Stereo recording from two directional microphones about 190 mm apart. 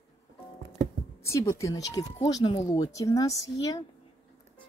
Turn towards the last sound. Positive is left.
turn(degrees=15)  # may be behind; listen again after turning